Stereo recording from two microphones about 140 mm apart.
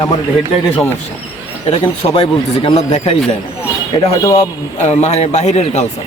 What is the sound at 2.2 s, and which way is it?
Speech, 35° left (ahead or behind).